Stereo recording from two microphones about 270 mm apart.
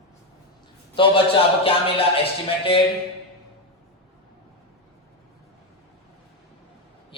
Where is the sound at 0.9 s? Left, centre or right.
Centre.